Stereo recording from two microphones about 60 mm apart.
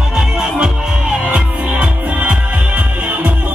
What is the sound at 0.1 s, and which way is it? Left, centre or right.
Music, centre.